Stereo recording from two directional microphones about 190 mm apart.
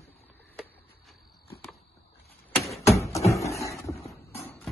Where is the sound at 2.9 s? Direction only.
15° left (ahead or behind).